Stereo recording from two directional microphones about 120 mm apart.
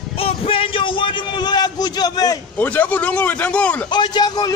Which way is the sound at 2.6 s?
10° left (ahead or behind).